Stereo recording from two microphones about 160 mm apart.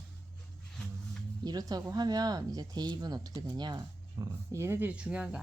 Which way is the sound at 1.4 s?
25° right (ahead or behind).